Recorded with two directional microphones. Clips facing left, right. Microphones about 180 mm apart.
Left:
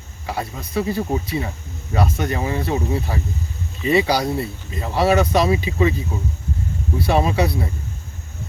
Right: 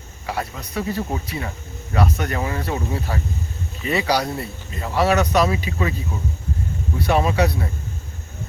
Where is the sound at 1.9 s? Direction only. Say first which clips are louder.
Left 1 dB; 25° left (ahead or behind).